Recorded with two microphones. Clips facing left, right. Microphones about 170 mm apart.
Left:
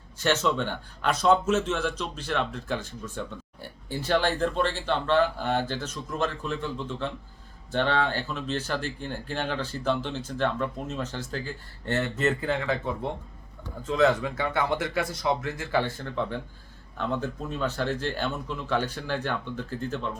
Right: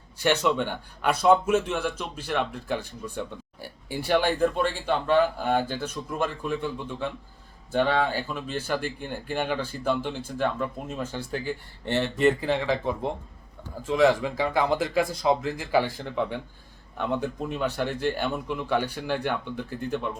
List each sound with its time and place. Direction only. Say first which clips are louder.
0.2 s speech: right 2 dB; 15° right (ahead or behind)